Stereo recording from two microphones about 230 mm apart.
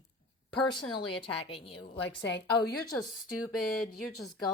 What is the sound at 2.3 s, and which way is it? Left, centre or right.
Speech, left.